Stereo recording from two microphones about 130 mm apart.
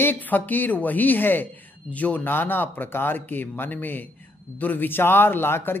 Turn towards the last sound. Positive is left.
turn(degrees=15)  # may be behind; listen again after turning